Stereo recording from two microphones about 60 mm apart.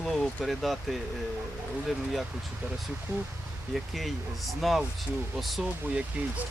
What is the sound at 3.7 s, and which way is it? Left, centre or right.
Speech, centre.